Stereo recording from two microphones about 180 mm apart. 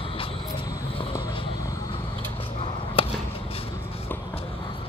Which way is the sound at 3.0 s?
30° left (ahead or behind).